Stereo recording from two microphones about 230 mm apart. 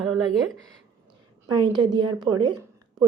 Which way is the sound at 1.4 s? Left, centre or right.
Centre.